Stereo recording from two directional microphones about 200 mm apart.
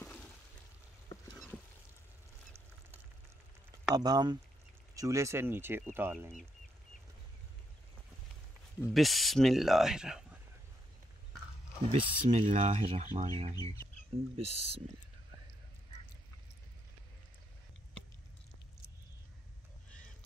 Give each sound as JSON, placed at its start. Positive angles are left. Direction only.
{"t": 0.0, "sound": "a sound", "side_deg": 5}
{"t": 3.9, "sound": "speech", "side_deg": -20}
{"t": 8.9, "sound": "speech", "side_deg": 0}
{"t": 11.9, "sound": "speech", "side_deg": -25}
{"t": 13.0, "sound": "speech", "side_deg": -40}